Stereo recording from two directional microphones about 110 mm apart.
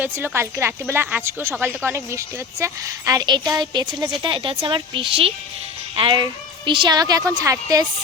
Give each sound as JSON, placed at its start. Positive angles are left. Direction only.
{"t": 0.0, "sound": "a woman's voice", "side_deg": -20}